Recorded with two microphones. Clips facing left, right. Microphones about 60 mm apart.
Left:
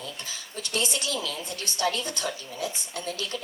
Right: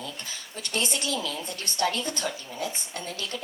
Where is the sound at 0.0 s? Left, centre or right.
Right.